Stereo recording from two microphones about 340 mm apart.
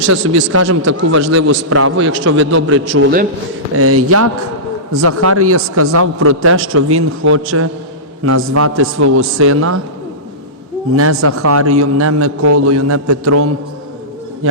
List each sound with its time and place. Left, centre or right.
0.3 s a man's voice: right
3.8 s a man's voice: right
10.9 s a man's voice: right